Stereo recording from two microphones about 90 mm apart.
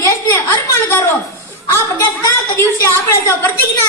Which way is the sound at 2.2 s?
35° left (ahead or behind).